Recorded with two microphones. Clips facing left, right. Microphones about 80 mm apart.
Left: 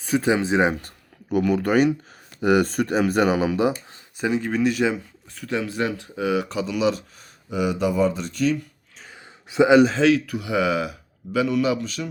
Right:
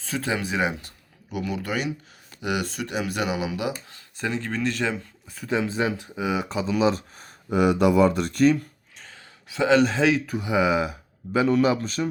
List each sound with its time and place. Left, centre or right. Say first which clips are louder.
0.0 s speech: left 7 dB; centre
0.7 s speech: left 6 dB; left
4.2 s speech: left 5 dB; centre
5.3 s speech: right 1 dB; centre; by 8.5 s right
9.0 s a sound: left 4 dB; centre
10.2 s speech: even; right
11.3 s speech: right 1 dB; right